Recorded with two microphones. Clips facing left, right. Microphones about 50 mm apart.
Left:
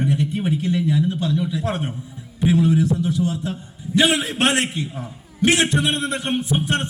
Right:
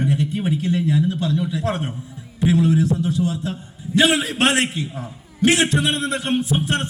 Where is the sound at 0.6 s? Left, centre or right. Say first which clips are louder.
Right 1 dB; right.